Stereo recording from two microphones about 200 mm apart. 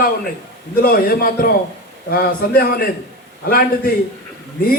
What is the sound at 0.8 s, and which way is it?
A man's voice, 45° left (ahead or behind).